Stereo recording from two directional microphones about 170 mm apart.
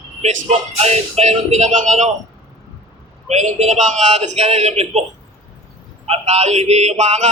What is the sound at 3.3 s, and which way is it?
Speech, 40° right (ahead or behind).